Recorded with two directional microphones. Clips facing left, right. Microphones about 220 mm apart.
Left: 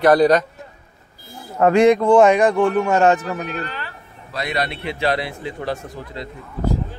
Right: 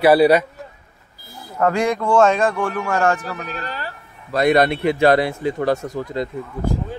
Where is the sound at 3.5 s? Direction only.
40° right (ahead or behind).